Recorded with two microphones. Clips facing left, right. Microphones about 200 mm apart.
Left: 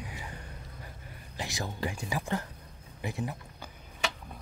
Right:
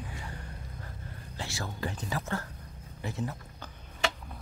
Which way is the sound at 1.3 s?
15° left (ahead or behind).